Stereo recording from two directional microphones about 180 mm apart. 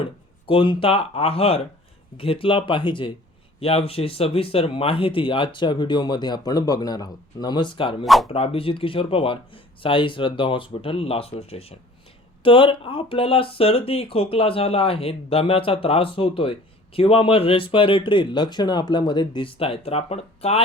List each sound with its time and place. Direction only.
0.0 s speech: 30° left (ahead or behind)
8.0 s speech: centre (ahead or behind)
8.3 s speech: 30° left (ahead or behind)